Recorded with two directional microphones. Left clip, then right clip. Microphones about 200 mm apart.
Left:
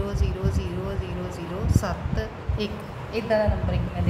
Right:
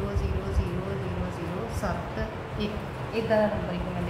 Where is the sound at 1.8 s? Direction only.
55° left (ahead or behind).